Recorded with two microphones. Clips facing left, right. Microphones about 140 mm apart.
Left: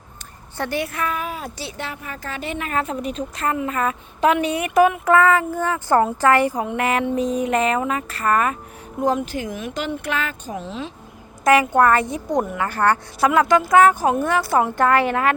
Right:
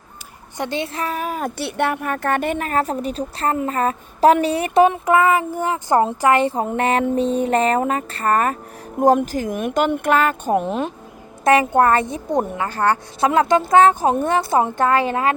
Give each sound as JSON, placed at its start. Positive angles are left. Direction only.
{"t": 0.5, "sound": "a woman's voice", "side_deg": -20}
{"t": 11.4, "sound": "speech", "side_deg": -25}